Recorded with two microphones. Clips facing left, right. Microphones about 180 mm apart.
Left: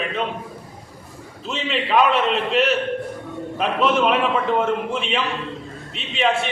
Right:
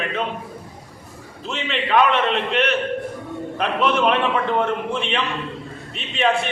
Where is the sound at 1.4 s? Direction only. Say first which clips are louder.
Left 1 dB; centre (ahead or behind).